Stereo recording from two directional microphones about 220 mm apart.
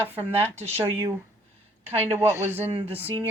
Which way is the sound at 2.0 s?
10° right (ahead or behind).